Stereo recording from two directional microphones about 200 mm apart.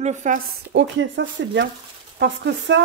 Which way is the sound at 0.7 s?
65° right (ahead or behind).